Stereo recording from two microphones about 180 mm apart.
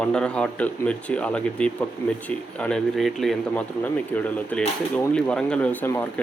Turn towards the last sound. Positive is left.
turn(degrees=10)  # may be behind; listen again after turning